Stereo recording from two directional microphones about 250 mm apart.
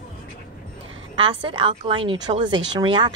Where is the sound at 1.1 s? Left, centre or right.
Centre.